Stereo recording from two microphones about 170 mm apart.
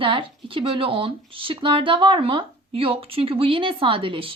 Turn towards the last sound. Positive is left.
turn(degrees=-30)  # may be behind; listen again after turning